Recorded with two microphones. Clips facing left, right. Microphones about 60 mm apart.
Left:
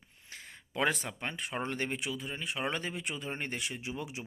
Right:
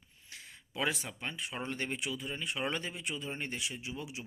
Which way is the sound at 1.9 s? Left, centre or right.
Left.